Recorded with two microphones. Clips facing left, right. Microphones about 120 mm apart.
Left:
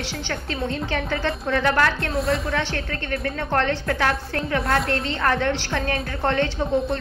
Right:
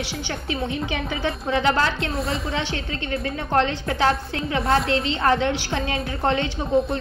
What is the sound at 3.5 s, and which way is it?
A woman's voice, 15° right (ahead or behind).